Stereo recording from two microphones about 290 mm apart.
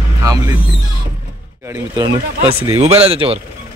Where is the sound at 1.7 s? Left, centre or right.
Centre.